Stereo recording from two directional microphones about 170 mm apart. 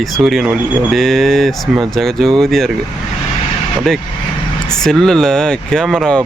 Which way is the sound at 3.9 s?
Centre (ahead or behind).